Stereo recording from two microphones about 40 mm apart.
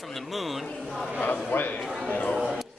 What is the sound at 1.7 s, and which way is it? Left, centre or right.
Speech, centre.